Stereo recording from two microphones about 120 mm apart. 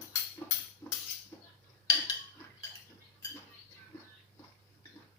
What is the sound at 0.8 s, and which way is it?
Music, 20° left (ahead or behind).